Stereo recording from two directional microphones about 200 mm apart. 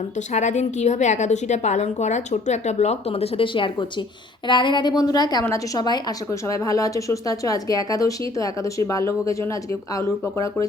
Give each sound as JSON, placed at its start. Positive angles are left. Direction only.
{"t": 0.2, "sound": "a woman's voice", "side_deg": 35}